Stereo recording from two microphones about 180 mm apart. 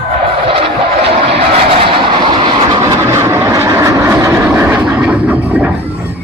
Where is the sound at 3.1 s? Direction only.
15° right (ahead or behind).